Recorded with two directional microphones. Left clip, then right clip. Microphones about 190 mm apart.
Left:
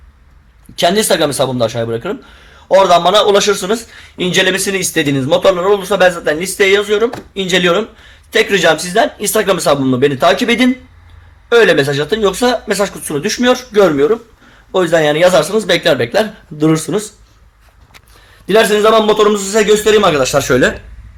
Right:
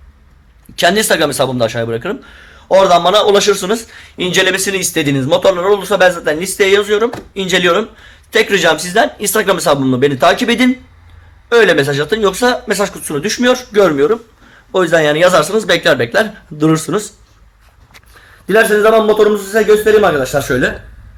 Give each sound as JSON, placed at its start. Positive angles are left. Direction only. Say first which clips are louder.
{"t": 0.8, "sound": "speech", "louder": "even", "side_deg": 0}
{"t": 18.4, "sound": "a man's voice", "louder": "even", "side_deg": 10}
{"t": 20.4, "sound": "speech", "louder": "left 3 dB", "side_deg": 30}